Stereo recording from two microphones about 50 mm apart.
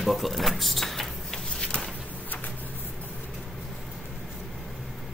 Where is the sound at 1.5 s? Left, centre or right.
Centre.